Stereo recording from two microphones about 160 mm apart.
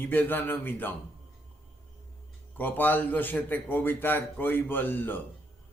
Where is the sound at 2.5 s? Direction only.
10° left (ahead or behind).